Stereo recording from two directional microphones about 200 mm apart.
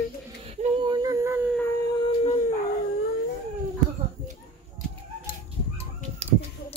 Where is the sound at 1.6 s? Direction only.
15° left (ahead or behind); by 2.4 s 30° left (ahead or behind).